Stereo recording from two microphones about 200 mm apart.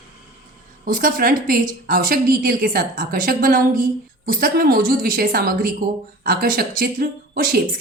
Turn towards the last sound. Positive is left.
turn(degrees=-50)  # may be behind; listen again after turning